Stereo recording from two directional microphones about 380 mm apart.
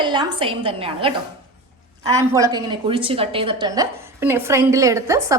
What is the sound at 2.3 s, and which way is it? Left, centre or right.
A woman's voice, centre.